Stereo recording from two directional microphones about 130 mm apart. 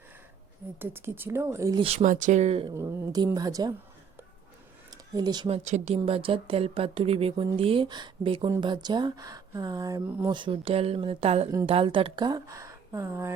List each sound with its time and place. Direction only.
0.8 s a woman's voice: 15° right (ahead or behind)
1.8 s speech: 45° right (ahead or behind)
2.0 s speech: 70° right (ahead or behind); by 2.6 s 55° right (ahead or behind)
2.7 s a woman's voice: 30° right (ahead or behind)
4.9 s a sound: 35° right (ahead or behind)
5.5 s speech: 65° right (ahead or behind)
6.1 s a woman's voice: 45° right (ahead or behind); by 13.3 s 20° right (ahead or behind)